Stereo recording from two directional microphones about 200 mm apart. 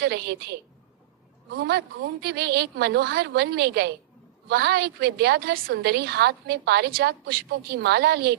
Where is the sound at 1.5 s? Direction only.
55° right (ahead or behind).